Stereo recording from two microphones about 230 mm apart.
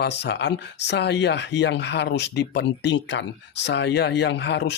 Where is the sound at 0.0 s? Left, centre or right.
Left.